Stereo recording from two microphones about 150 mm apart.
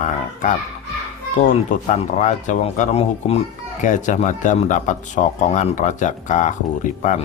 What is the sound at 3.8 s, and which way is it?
Speech, 55° left (ahead or behind).